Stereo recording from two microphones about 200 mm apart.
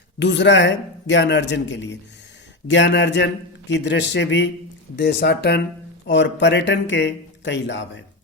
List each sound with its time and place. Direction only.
0.2 s speech: 60° left (ahead or behind)